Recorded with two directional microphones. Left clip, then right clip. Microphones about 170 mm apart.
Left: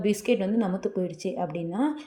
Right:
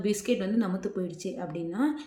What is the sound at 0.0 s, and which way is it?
Speech, 10° left (ahead or behind).